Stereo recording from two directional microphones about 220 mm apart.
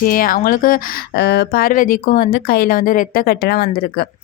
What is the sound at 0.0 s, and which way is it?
A woman's voice, 40° left (ahead or behind).